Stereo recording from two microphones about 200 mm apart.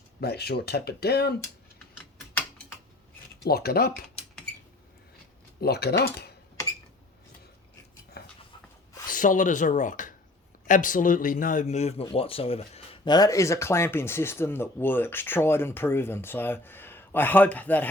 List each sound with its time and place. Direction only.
0.2 s speech: 50° left (ahead or behind)
3.4 s speech: 50° left (ahead or behind)
5.5 s speech: 55° left (ahead or behind)
8.2 s a sound: 50° left (ahead or behind)
9.0 s a man's voice: 40° left (ahead or behind); by 17.8 s 10° left (ahead or behind)